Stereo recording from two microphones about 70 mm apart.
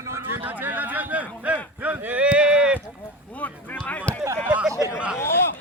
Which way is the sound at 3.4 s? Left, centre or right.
Left.